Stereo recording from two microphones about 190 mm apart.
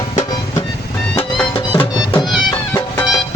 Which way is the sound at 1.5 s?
30° left (ahead or behind).